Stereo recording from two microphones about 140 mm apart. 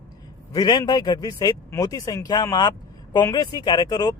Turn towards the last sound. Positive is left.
turn(degrees=30)  # may be behind; listen again after turning